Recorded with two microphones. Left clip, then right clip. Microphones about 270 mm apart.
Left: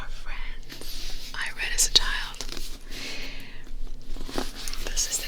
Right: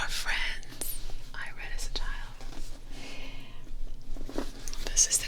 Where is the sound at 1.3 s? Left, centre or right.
Centre.